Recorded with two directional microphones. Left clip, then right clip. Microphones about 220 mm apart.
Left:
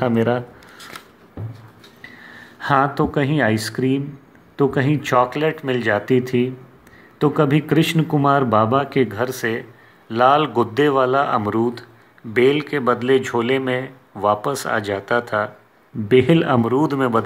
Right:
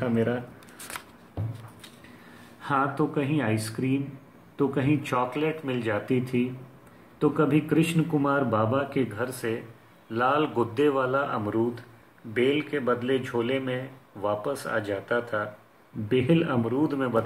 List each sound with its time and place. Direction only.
0.0 s speech: 45° left (ahead or behind)
2.6 s speech: 45° left (ahead or behind)